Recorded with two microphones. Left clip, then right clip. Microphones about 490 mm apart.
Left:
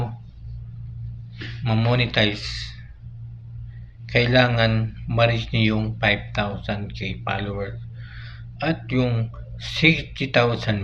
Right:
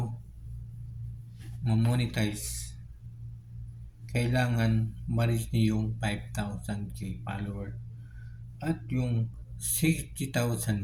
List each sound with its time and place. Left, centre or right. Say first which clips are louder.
1.6 s speech: left 10 dB; right
4.0 s speech: left 13 dB; right